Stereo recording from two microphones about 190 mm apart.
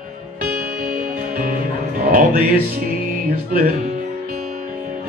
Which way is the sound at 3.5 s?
45° right (ahead or behind).